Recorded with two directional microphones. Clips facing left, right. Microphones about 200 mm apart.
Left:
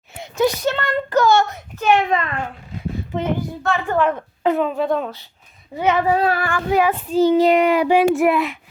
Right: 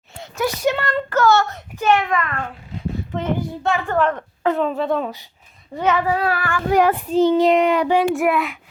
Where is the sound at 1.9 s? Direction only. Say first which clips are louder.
Left 1 dB; 25° left (ahead or behind).